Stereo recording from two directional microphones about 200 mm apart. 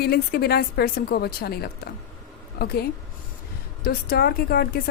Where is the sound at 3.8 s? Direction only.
50° left (ahead or behind).